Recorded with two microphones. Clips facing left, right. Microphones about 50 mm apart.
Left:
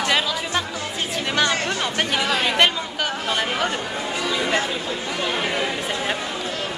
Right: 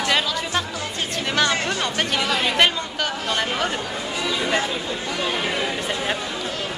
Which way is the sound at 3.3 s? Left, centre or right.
Centre.